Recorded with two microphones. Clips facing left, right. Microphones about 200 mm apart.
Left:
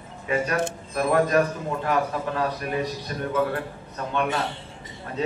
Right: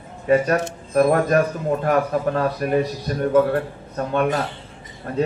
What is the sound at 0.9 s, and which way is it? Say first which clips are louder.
A man's voice: right 5 dB; 45° right (ahead or behind).